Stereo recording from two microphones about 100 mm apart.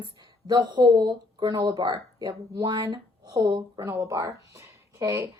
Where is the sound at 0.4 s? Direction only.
50° right (ahead or behind).